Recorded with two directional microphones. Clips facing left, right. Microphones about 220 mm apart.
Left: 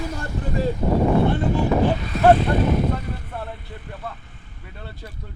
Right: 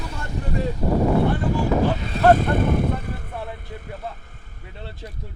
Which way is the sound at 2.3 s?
50° right (ahead or behind).